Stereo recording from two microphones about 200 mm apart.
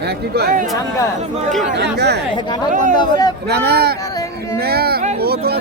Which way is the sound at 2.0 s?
55° right (ahead or behind).